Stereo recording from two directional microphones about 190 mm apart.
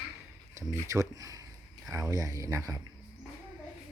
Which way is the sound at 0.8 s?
15° right (ahead or behind).